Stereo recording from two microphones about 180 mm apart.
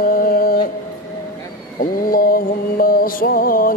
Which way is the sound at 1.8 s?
55° left (ahead or behind).